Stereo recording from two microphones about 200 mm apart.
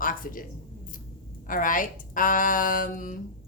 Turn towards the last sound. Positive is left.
turn(degrees=45)  # may be behind; listen again after turning